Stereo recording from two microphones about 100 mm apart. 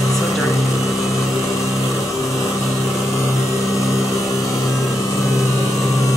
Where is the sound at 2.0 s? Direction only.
30° left (ahead or behind).